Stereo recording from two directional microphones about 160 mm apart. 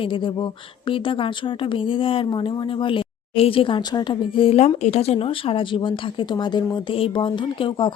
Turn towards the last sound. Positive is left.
turn(degrees=30)  # may be behind; listen again after turning